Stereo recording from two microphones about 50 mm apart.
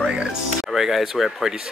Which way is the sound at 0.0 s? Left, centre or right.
Centre.